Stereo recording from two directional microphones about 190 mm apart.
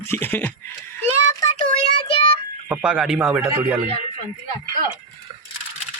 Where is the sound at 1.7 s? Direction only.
25° left (ahead or behind).